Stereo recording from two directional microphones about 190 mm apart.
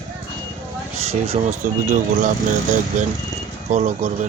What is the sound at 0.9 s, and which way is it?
Speech, 30° right (ahead or behind).